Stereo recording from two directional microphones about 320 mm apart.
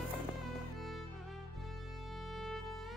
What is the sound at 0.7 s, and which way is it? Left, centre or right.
Music, centre.